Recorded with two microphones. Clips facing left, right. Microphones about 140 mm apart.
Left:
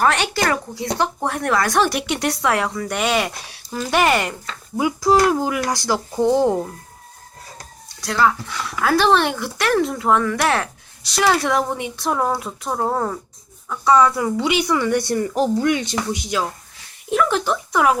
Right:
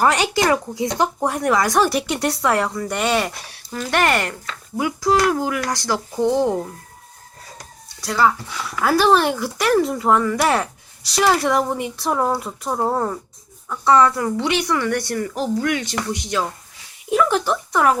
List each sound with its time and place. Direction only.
0.0 s speech: 10° right (ahead or behind); by 6.6 s 15° left (ahead or behind)
8.0 s speech: 5° right (ahead or behind); by 16.1 s 20° left (ahead or behind)
17.1 s speech: 5° right (ahead or behind)